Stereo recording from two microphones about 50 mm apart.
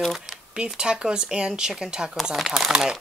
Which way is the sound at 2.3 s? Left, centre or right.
Centre.